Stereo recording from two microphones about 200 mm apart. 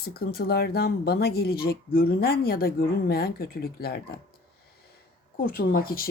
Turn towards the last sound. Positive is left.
turn(degrees=45)  # may be behind; listen again after turning